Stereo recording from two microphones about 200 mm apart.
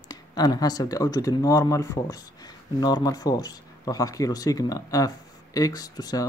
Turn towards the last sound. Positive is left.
turn(degrees=20)  # may be behind; listen again after turning